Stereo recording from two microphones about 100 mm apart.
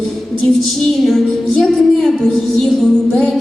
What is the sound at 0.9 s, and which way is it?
Music, 5° left (ahead or behind).